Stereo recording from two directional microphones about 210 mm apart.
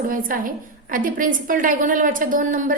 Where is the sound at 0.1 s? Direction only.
40° right (ahead or behind).